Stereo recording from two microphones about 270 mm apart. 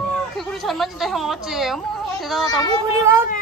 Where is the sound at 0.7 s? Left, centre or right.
Centre.